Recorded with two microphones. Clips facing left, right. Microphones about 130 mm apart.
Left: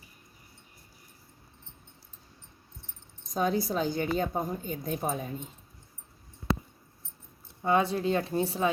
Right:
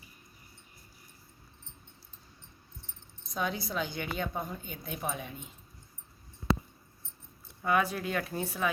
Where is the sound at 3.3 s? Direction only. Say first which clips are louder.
Left 6 dB; 40° left (ahead or behind).